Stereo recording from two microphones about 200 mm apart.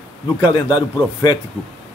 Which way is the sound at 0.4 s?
20° left (ahead or behind).